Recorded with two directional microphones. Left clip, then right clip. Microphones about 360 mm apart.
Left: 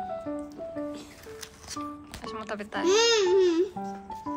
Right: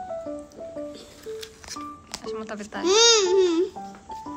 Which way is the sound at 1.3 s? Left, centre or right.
Centre.